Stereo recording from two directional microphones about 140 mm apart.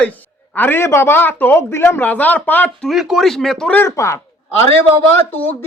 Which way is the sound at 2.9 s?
Centre (ahead or behind).